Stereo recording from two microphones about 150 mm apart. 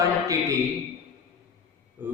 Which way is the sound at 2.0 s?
15° right (ahead or behind).